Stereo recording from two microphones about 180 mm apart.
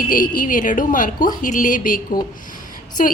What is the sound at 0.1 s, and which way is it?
Speech, 50° left (ahead or behind).